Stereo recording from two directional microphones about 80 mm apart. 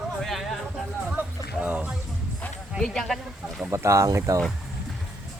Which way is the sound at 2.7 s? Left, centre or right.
Centre.